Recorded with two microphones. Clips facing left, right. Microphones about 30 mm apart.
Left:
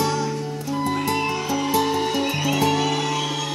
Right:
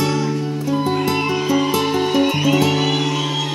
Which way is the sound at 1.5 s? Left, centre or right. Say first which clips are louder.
Right 3 dB; right.